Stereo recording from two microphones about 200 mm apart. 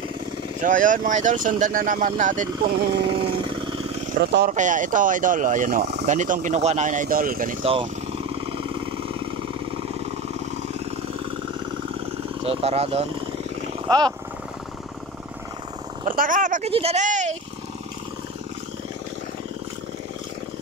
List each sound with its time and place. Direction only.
0.6 s speech: 40° right (ahead or behind)
4.2 s speech: 55° right (ahead or behind)
4.5 s speech: 40° right (ahead or behind)
7.6 s vehicle: 30° right (ahead or behind)
12.4 s speech: 30° right (ahead or behind)
13.8 s speech: 20° right (ahead or behind)
16.1 s speech: 40° right (ahead or behind)